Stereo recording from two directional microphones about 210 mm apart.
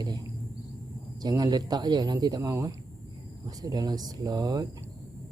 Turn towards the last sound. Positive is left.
turn(degrees=-20)  # may be behind; listen again after turning